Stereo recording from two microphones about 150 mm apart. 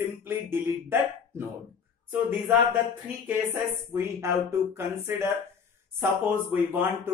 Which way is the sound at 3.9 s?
20° right (ahead or behind).